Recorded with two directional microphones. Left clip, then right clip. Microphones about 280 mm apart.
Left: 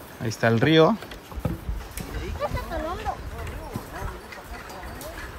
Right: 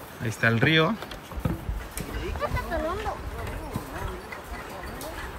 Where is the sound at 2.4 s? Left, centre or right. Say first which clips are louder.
Even; centre.